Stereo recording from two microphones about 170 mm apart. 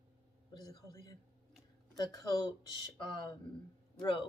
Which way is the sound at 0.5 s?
20° left (ahead or behind).